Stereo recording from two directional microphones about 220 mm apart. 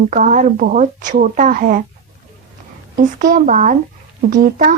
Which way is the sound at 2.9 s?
40° right (ahead or behind).